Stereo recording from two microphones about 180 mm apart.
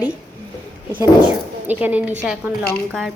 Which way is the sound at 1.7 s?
10° right (ahead or behind).